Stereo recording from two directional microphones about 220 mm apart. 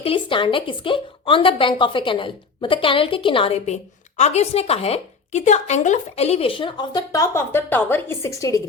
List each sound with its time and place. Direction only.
0.0 s a woman's voice: 25° left (ahead or behind)